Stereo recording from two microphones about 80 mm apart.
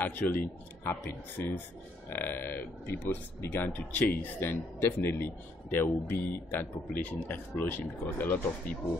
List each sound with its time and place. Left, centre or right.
0.0 s speech: centre
1.4 s speech: left